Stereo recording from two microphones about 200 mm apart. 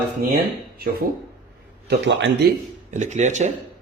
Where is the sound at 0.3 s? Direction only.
50° right (ahead or behind).